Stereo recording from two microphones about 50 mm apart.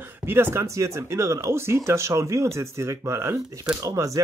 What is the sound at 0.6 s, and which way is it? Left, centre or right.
Speech, right.